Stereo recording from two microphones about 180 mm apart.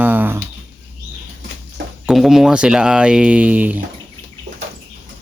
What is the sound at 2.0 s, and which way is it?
Speech, centre (ahead or behind).